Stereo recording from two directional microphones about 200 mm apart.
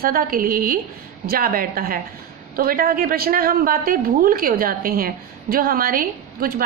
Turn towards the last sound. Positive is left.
turn(degrees=-45)  # may be behind; listen again after turning